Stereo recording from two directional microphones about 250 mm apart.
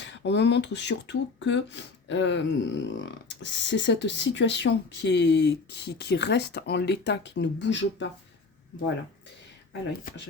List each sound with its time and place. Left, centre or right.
0.0 s speech: left